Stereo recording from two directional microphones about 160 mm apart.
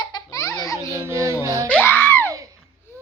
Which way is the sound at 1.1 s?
15° right (ahead or behind).